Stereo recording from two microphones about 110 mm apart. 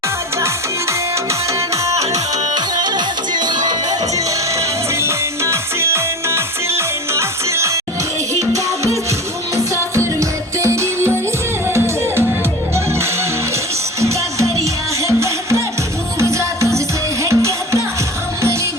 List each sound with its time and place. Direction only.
1.7 s music: 30° right (ahead or behind)
3.3 s music: 40° right (ahead or behind)
4.9 s music: 25° right (ahead or behind)
14.0 s music: 25° right (ahead or behind)